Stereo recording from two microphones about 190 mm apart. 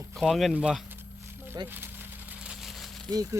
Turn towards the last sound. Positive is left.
turn(degrees=-20)  # may be behind; listen again after turning